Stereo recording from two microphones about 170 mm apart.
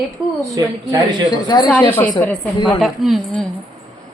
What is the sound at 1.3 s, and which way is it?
Speech, 25° left (ahead or behind).